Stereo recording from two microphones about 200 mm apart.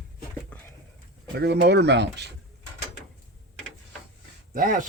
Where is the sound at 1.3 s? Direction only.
55° right (ahead or behind).